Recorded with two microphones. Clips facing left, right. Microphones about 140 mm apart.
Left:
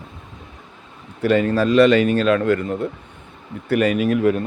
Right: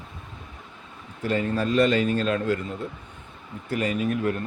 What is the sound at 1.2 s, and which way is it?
Speech, 85° left.